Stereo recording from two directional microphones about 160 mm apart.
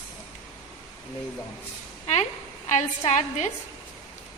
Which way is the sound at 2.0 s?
40° left (ahead or behind).